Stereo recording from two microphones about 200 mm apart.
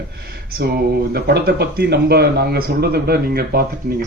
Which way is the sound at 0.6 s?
55° right (ahead or behind).